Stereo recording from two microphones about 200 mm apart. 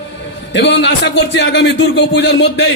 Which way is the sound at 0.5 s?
60° left (ahead or behind).